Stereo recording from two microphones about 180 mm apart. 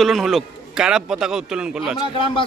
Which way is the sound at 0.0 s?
Centre (ahead or behind).